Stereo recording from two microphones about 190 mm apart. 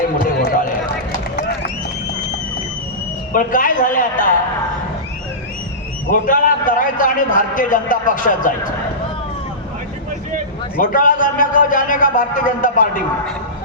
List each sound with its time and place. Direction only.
0.3 s run: 55° left (ahead or behind)
3.3 s a man's voice: 45° left (ahead or behind)
6.1 s a man's voice: 45° left (ahead or behind)
10.8 s a man's voice: 45° left (ahead or behind)